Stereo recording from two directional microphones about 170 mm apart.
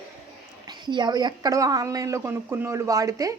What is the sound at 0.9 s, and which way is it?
Speech, 25° right (ahead or behind).